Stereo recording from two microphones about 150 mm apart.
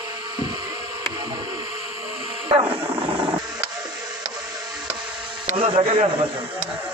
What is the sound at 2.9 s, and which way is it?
Vehicle, 35° right (ahead or behind).